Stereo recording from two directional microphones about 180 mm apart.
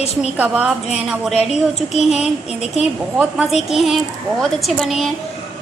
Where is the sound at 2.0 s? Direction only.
5° right (ahead or behind).